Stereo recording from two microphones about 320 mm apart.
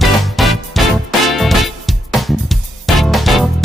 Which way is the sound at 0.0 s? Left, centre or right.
Centre.